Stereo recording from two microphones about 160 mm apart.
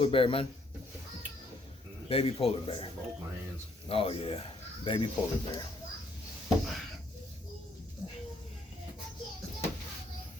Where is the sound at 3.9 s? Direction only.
35° left (ahead or behind).